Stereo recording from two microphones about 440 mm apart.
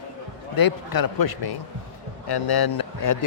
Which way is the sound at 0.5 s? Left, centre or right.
Left.